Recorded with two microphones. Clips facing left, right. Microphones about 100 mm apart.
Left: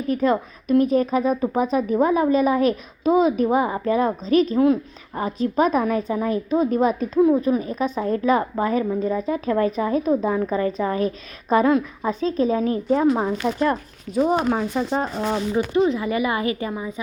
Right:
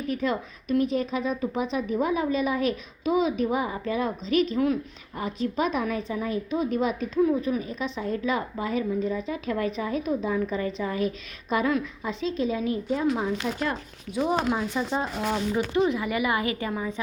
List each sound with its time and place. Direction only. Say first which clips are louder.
0.1 s a woman's voice: left 8 dB; 40° left (ahead or behind)
7.2 s speech: left 6 dB; 30° left (ahead or behind)
7.4 s a woman's voice: left 7 dB; 40° left (ahead or behind)